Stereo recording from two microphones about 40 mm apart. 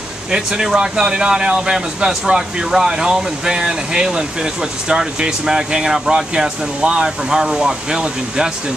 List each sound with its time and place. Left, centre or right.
0.3 s speech: centre